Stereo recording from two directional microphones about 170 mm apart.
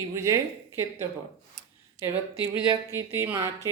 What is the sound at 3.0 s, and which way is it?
Speech, 15° right (ahead or behind).